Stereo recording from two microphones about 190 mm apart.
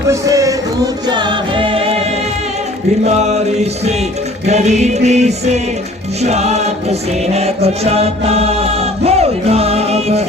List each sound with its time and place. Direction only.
0.1 s a sound: 15° right (ahead or behind)
1.1 s music: 25° right (ahead or behind)
3.1 s music: 35° right (ahead or behind)